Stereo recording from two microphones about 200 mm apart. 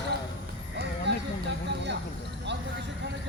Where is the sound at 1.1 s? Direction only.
60° right (ahead or behind).